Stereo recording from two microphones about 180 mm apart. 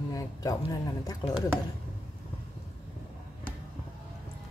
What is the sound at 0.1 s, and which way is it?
Speech, 20° left (ahead or behind).